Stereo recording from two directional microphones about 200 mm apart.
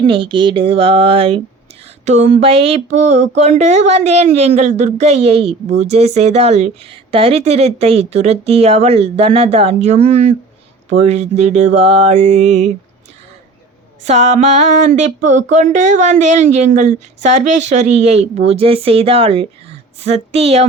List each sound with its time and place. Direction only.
0.0 s a woman's voice: 25° right (ahead or behind)
14.0 s a woman's voice: 35° right (ahead or behind)